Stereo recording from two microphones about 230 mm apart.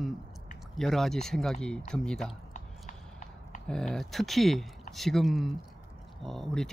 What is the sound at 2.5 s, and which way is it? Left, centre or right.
Clip-clop, left.